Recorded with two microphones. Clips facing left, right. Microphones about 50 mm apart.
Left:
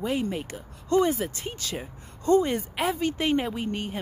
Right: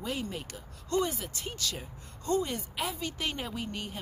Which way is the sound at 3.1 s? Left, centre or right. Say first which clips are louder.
Left 10 dB; left.